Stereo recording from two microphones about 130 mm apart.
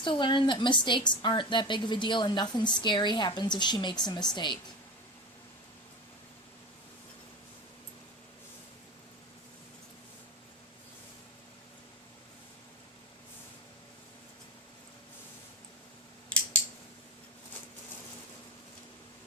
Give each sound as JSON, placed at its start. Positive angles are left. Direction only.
{"t": 0.0, "sound": "a woman's voice", "side_deg": 35}